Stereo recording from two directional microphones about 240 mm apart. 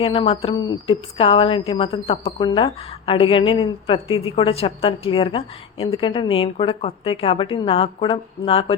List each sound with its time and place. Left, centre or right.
0.0 s a woman's voice: left